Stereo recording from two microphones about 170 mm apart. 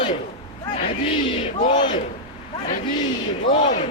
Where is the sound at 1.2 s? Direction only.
30° left (ahead or behind).